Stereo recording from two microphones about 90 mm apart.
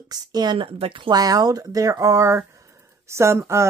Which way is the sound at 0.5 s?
85° right.